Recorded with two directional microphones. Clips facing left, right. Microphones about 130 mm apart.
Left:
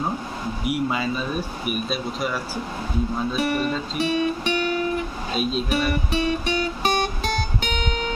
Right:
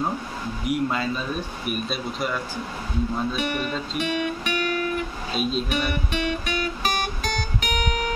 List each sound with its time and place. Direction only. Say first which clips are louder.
0.7 s speech: even; 5° left (ahead or behind)
3.3 s speech: left 4 dB; 35° left (ahead or behind)
4.0 s music: left 5 dB; 30° left (ahead or behind)
5.3 s speech: left 2 dB; centre (ahead or behind)
6.1 s music: left 4 dB; 30° left (ahead or behind)